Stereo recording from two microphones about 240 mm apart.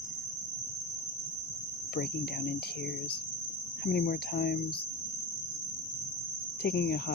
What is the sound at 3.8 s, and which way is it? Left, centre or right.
Speech, left.